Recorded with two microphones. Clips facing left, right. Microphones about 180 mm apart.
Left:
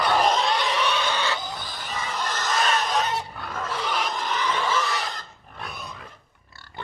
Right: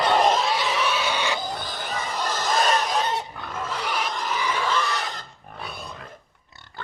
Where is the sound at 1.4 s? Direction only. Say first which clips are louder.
Right 4 dB; 35° right (ahead or behind).